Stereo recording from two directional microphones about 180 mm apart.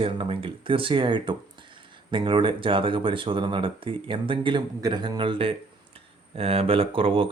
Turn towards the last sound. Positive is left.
turn(degrees=-30)  # may be behind; listen again after turning